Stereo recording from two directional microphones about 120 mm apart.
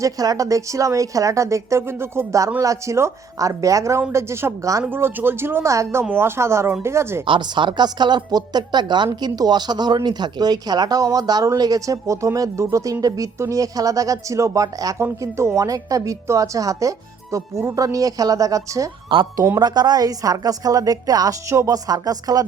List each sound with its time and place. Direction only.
0.0 s speech: 30° right (ahead or behind)
7.3 s a woman's voice: 40° right (ahead or behind)
19.0 s speech: 45° right (ahead or behind)
19.4 s a woman's voice: 35° right (ahead or behind)